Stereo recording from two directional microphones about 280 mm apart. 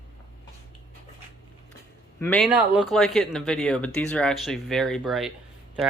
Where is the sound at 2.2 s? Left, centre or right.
Centre.